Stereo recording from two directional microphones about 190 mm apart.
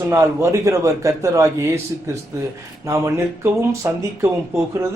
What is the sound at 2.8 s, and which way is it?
Speech, 15° right (ahead or behind).